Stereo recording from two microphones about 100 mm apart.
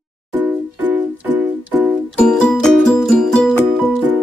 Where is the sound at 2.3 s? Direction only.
5° left (ahead or behind).